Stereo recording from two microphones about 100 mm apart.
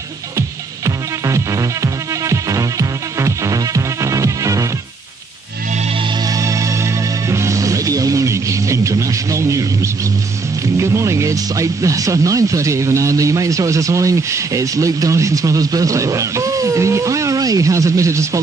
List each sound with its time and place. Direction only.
0.4 s music: 30° right (ahead or behind)
6.2 s music: 35° right (ahead or behind)
10.8 s speech: 30° right (ahead or behind)